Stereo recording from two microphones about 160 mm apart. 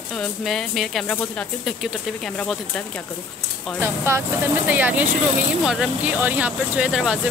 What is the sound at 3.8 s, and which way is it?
Speech, 15° right (ahead or behind).